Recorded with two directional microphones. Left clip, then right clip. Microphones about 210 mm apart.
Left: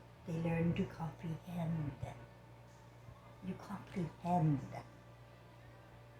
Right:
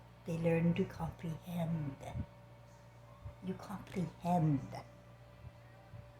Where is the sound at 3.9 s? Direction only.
50° right (ahead or behind).